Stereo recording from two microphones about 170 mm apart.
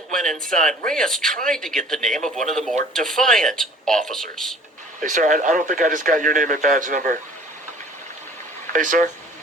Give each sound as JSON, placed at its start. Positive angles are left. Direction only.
{"t": 0.1, "sound": "speech", "side_deg": 5}
{"t": 5.0, "sound": "speech", "side_deg": -50}
{"t": 8.7, "sound": "speech", "side_deg": -50}